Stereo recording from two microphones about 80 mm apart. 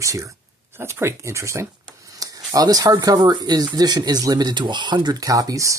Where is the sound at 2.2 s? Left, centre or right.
Right.